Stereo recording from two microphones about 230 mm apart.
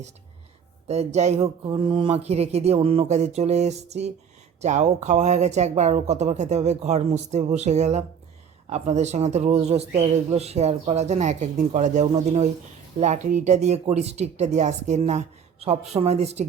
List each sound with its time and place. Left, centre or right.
0.9 s speech: right